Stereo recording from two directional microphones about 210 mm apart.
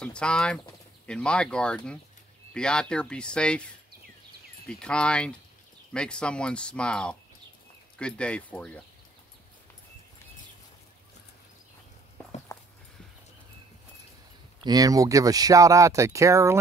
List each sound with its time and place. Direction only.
0.0 s speech: 5° left (ahead or behind)
12.5 s walk: 15° left (ahead or behind)
14.6 s speech: 20° right (ahead or behind)